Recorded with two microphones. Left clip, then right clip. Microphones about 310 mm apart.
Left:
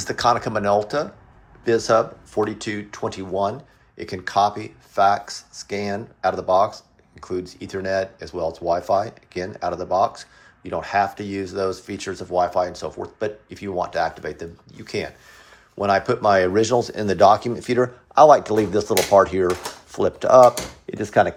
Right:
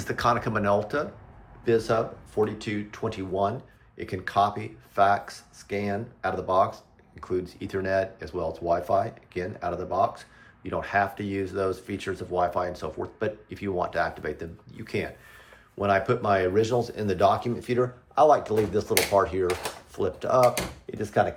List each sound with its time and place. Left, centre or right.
0.0 s speech: centre; by 21.3 s left